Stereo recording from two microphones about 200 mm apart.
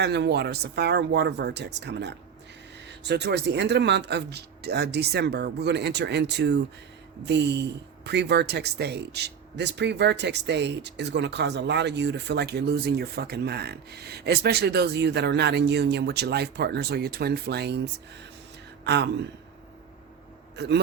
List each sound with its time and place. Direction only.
0.0 s speech: 60° right (ahead or behind)
18.9 s speech: 60° right (ahead or behind)
20.6 s speech: 60° right (ahead or behind)